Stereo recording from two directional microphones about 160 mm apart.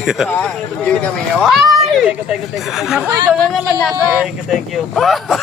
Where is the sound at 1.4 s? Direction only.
Centre (ahead or behind).